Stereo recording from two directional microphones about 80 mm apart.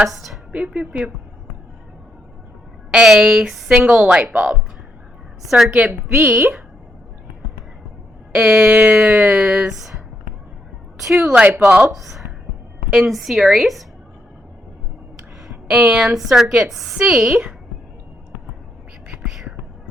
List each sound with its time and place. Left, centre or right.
0.0 s a woman's voice: centre
0.5 s speech: centre
2.9 s a woman's voice: centre
5.4 s a woman's voice: centre
6.1 s speech: right
8.3 s speech: centre
10.9 s a woman's voice: centre
15.6 s a woman's voice: centre
19.3 s whispering: centre